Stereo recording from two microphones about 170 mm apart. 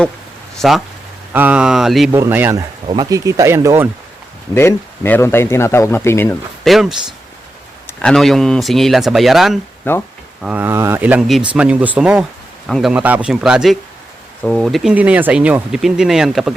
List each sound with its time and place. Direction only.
0.6 s speech: centre (ahead or behind)
2.1 s speech: 15° right (ahead or behind)
2.8 s speech: 30° right (ahead or behind)
4.5 s speech: 10° left (ahead or behind)
6.7 s speech: centre (ahead or behind)
8.0 s speech: centre (ahead or behind)